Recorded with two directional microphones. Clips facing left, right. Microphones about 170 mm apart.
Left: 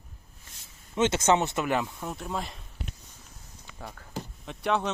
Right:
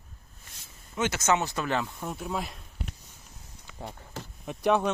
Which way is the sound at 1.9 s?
Centre (ahead or behind).